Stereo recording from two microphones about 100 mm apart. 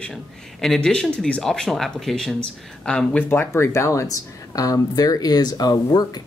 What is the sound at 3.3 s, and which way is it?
Speech, 25° left (ahead or behind).